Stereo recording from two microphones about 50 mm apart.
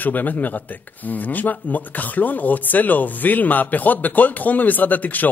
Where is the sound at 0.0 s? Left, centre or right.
Left.